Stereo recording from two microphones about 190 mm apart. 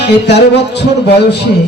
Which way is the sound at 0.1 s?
60° left (ahead or behind).